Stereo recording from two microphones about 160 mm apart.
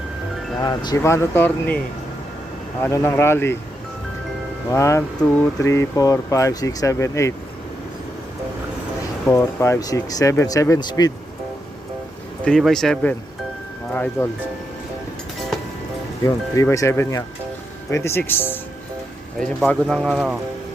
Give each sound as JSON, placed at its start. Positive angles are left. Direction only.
{"t": 0.6, "sound": "speech", "side_deg": 25}
{"t": 2.8, "sound": "speech", "side_deg": 20}
{"t": 4.7, "sound": "speech", "side_deg": 20}
{"t": 9.2, "sound": "speech", "side_deg": 20}
{"t": 12.5, "sound": "speech", "side_deg": 0}
{"t": 16.2, "sound": "speech", "side_deg": 20}